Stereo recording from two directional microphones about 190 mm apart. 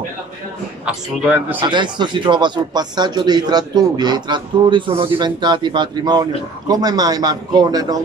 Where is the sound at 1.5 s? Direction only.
25° right (ahead or behind).